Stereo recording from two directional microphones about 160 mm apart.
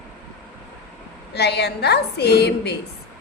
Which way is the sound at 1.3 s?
90° left.